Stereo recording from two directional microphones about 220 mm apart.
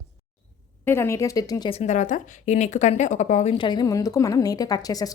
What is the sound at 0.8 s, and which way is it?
Speech, 10° left (ahead or behind).